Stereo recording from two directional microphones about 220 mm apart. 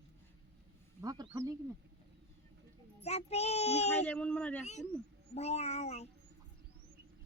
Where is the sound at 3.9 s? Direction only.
5° left (ahead or behind).